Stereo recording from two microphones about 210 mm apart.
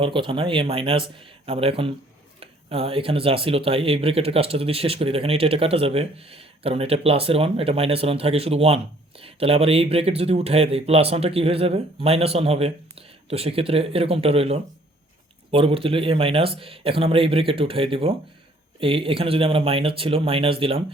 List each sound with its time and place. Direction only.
0.0 s speech: 25° right (ahead or behind)